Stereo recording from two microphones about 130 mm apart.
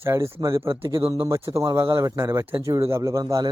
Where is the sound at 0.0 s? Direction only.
20° right (ahead or behind).